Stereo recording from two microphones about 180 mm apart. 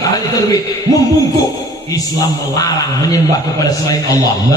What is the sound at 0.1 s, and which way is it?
Speech, 20° left (ahead or behind).